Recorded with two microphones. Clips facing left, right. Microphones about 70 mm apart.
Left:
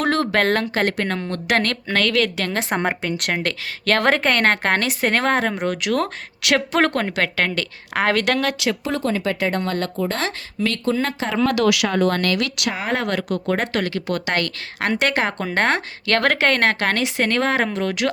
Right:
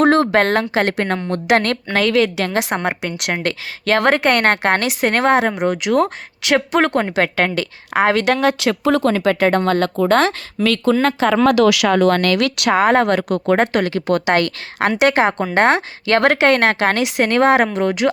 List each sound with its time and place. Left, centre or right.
0.0 s a sound: right
0.5 s a woman's voice: centre
8.5 s speech: right
8.9 s a woman's voice: right
13.7 s a woman's voice: right